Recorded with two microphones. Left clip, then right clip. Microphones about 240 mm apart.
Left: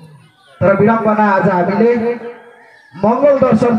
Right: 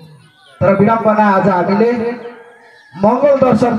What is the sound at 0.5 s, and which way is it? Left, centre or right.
A man's voice, right.